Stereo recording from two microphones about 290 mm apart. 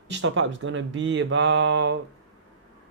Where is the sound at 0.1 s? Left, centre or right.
Right.